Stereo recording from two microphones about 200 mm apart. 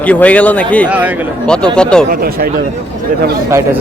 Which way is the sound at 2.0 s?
45° right (ahead or behind).